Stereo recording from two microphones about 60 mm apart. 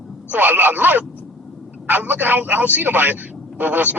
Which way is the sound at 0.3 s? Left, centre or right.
Right.